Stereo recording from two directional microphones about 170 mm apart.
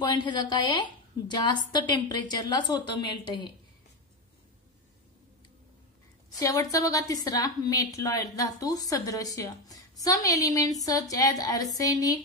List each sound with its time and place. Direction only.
0.0 s a woman's voice: 25° left (ahead or behind)
6.4 s a woman's voice: 20° left (ahead or behind)